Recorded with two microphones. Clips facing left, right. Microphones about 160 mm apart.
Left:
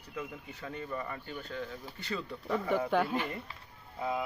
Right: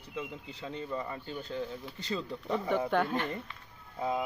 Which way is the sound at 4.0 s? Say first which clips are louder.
Right 2 dB; 25° right (ahead or behind).